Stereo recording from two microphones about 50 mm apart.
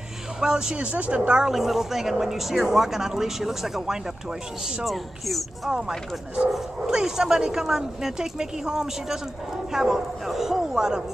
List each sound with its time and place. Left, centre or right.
0.4 s speech: centre
0.8 s a woman's voice: right
1.5 s speech: centre
4.8 s speech: centre
5.7 s speech: centre